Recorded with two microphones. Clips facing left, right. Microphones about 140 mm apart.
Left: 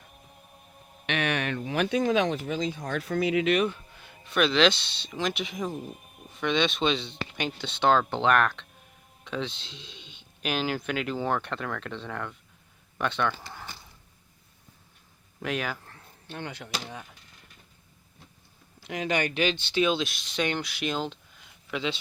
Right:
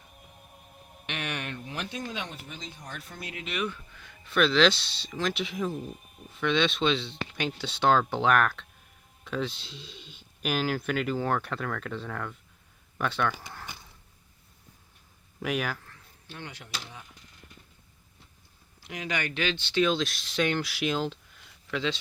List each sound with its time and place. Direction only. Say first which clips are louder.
1.0 s speech: left 7 dB; 90° left
3.6 s a sound: left 5 dB; 30° left (ahead or behind)
4.3 s speech: even; centre (ahead or behind)
15.4 s speech: right 1 dB; 5° right (ahead or behind)
15.9 s a sound: left 5 dB; 55° left (ahead or behind)
16.8 s speech: left 6 dB; 60° left (ahead or behind)
19.2 s speech: left 4 dB; 15° left (ahead or behind); by 21.4 s centre (ahead or behind)
21.7 s speech: right 1 dB; 10° left (ahead or behind)